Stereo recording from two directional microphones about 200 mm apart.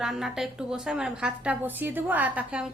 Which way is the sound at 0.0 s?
Centre (ahead or behind).